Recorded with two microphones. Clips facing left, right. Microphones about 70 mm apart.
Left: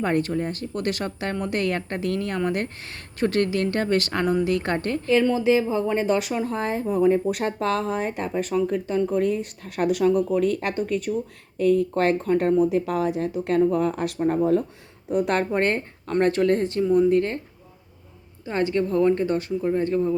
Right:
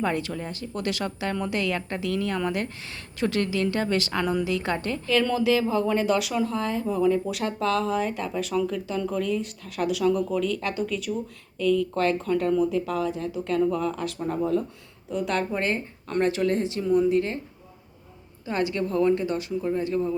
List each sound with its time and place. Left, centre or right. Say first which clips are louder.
0.0 s speech: left 4 dB; left
5.4 s speech: left 2 dB; left
9.2 s speech: left 3 dB; left
12.8 s speech: left 3 dB; left
13.6 s speech: left 4 dB; left
15.1 s speech: left 4 dB; left
16.2 s speech: left 3 dB; left
18.4 s speech: left 3 dB; left